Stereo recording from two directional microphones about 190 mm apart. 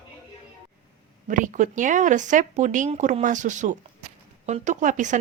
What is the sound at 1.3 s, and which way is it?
A woman's voice, 45° right (ahead or behind).